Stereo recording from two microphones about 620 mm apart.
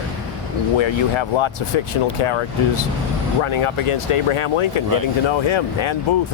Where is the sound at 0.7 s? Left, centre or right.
Left.